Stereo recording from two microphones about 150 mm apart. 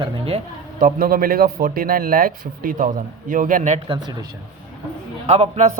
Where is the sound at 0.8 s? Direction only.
75° right (ahead or behind); by 3.8 s 55° right (ahead or behind).